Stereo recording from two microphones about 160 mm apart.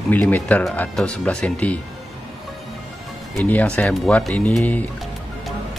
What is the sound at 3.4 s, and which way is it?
Speech, 10° left (ahead or behind).